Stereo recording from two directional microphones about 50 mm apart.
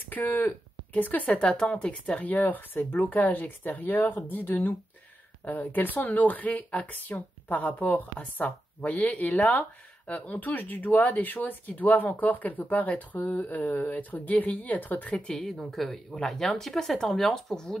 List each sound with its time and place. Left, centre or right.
0.1 s speech: left
1.4 s speech: centre; by 15.1 s left
15.4 s speech: centre